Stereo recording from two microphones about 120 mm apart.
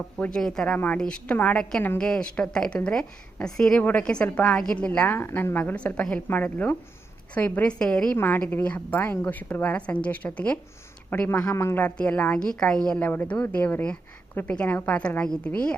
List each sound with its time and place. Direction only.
0.2 s a woman's voice: 5° left (ahead or behind); by 11.8 s 20° left (ahead or behind)
11.8 s a woman's voice: 10° left (ahead or behind)